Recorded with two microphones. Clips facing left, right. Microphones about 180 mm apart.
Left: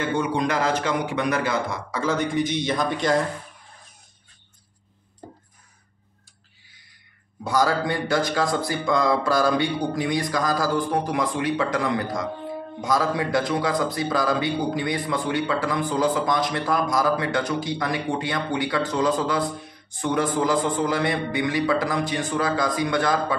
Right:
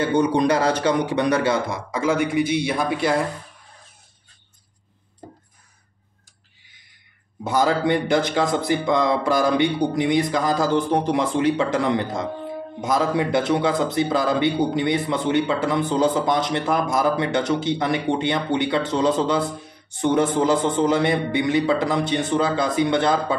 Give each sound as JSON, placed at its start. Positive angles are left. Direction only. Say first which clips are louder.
{"t": 0.0, "sound": "a man's voice", "louder": "right 5 dB", "side_deg": -35}
{"t": 1.9, "sound": "a man's voice", "louder": "right 4 dB", "side_deg": -10}
{"t": 7.4, "sound": "speech", "louder": "right 2 dB", "side_deg": -20}